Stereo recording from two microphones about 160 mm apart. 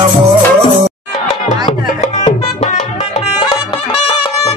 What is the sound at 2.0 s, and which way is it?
Music, 40° left (ahead or behind).